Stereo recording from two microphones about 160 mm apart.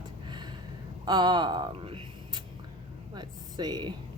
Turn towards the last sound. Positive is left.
turn(degrees=-25)  # may be behind; listen again after turning